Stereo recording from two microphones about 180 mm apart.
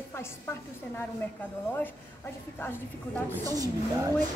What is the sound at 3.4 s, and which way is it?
Speech, 20° right (ahead or behind).